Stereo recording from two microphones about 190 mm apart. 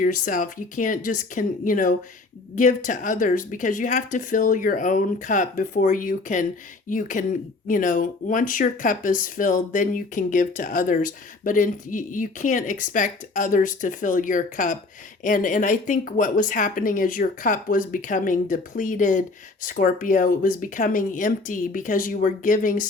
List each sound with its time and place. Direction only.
0.0 s speech: 45° left (ahead or behind)